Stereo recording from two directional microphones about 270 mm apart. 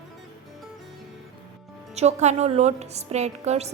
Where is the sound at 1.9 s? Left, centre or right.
Right.